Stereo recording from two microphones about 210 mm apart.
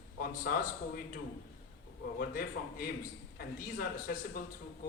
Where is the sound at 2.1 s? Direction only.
45° left (ahead or behind).